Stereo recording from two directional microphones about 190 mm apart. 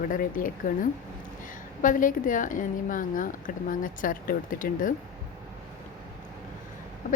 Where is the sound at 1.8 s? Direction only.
45° left (ahead or behind).